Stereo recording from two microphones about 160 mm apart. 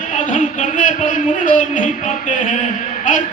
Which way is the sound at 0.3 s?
50° left (ahead or behind).